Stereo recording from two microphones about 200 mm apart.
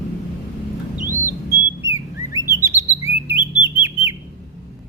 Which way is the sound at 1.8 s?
15° right (ahead or behind).